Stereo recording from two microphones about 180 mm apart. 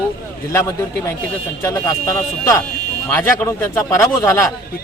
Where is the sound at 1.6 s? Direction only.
20° left (ahead or behind).